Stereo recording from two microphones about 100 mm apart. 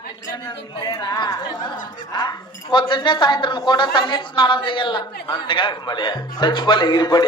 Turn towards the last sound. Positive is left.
turn(degrees=45)  # may be behind; listen again after turning